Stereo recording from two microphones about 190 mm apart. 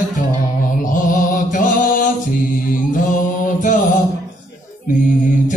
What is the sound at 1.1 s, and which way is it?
Mantra, 45° left (ahead or behind).